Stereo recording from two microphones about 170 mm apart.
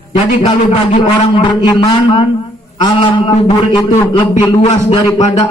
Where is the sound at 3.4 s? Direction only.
25° left (ahead or behind).